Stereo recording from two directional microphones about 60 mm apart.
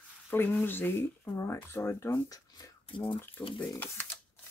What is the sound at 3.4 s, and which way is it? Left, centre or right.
Speech, left.